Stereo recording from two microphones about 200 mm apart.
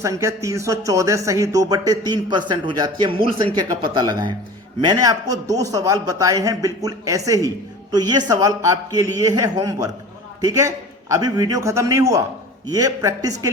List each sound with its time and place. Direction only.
0.0 s a man's voice: 15° right (ahead or behind)